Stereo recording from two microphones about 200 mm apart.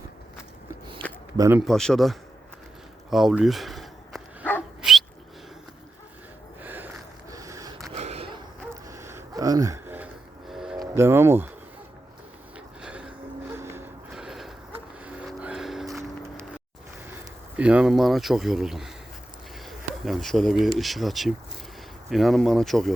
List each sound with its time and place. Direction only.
1.4 s a man's voice: 10° right (ahead or behind)
1.6 s speech: centre (ahead or behind)
3.1 s dog: centre (ahead or behind)
4.8 s owl: centre (ahead or behind)
6.6 s a sound: 10° right (ahead or behind)
7.9 s a sound: 30° right (ahead or behind)
8.7 s a sound: 15° right (ahead or behind)
10.5 s music: 5° right (ahead or behind)
10.8 s speech: 15° right (ahead or behind)
12.8 s music: 5° right (ahead or behind)
13.5 s a sound: 10° right (ahead or behind)
15.0 s vehicle: 5° right (ahead or behind)
17.6 s speech: 5° right (ahead or behind)
20.1 s speech: centre (ahead or behind)